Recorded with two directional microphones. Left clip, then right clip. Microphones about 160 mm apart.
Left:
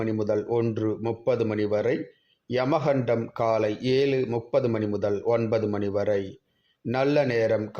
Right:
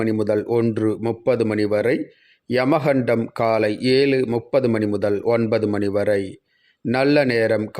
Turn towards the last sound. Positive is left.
turn(degrees=-30)  # may be behind; listen again after turning